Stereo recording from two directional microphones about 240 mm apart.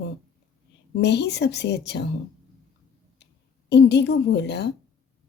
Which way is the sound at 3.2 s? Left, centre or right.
Left.